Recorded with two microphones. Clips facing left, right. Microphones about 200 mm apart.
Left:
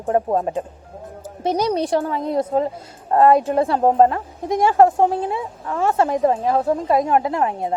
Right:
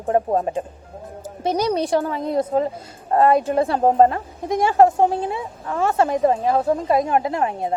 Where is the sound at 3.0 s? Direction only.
30° right (ahead or behind).